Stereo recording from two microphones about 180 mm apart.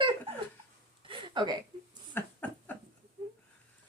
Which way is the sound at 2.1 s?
10° left (ahead or behind).